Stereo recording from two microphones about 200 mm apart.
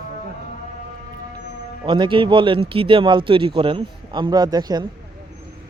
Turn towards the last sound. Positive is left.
turn(degrees=-20)  # may be behind; listen again after turning